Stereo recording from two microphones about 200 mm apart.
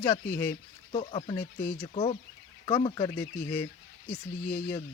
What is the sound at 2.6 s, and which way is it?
Speech, 20° left (ahead or behind).